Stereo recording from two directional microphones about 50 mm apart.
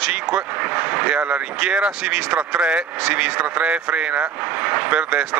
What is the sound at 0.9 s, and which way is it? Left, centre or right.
Speech, right.